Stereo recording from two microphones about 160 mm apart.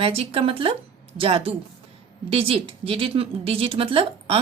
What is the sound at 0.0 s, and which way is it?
Speech, 35° right (ahead or behind).